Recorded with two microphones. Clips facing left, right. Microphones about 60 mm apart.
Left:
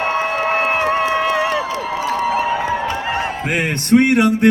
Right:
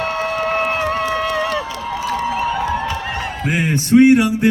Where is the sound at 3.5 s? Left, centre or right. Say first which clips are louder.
Right 1 dB; left.